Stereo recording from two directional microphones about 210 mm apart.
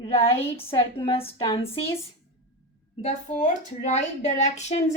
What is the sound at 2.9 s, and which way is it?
Speech, 35° left (ahead or behind).